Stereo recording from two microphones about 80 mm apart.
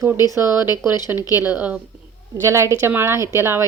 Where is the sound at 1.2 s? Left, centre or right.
Left.